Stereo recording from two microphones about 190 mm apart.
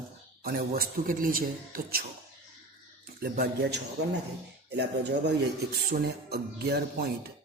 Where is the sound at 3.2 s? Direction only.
55° right (ahead or behind).